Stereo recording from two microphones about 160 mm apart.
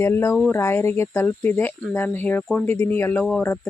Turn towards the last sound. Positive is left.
turn(degrees=10)  # may be behind; listen again after turning